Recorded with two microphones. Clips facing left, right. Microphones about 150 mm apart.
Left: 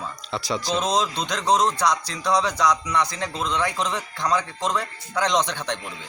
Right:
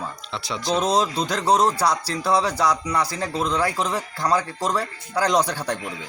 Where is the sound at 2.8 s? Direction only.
30° right (ahead or behind).